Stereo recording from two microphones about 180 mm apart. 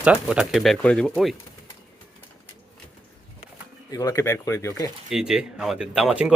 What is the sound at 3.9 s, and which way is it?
Speech, 20° left (ahead or behind).